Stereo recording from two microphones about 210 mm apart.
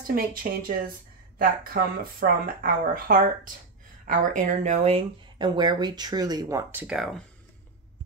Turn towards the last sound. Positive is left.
turn(degrees=-5)  # may be behind; listen again after turning